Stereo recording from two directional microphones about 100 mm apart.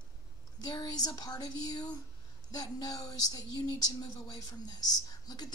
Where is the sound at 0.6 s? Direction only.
40° left (ahead or behind).